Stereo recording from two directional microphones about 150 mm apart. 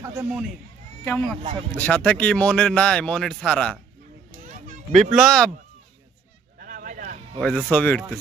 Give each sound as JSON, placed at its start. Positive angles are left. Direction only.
{"t": 0.0, "sound": "speech", "side_deg": -15}
{"t": 1.0, "sound": "speech", "side_deg": 10}
{"t": 4.5, "sound": "children playing", "side_deg": -55}
{"t": 5.1, "sound": "speech", "side_deg": 0}
{"t": 6.6, "sound": "a sound", "side_deg": -65}
{"t": 7.3, "sound": "speech", "side_deg": 10}